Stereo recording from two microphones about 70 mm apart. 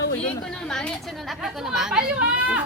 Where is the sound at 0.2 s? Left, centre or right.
Centre.